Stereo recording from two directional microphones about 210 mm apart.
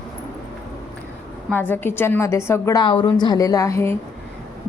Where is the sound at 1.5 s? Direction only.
10° left (ahead or behind).